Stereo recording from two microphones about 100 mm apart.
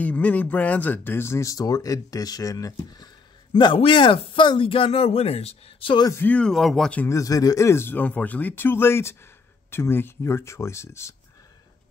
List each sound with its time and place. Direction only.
0.0 s speech: 15° left (ahead or behind); by 3.1 s 40° left (ahead or behind)
3.5 s speech: 55° left (ahead or behind); by 5.9 s 80° left
6.1 s speech: 15° left (ahead or behind)
7.1 s speech: 35° left (ahead or behind)